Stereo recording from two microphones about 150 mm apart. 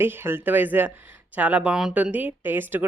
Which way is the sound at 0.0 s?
15° right (ahead or behind).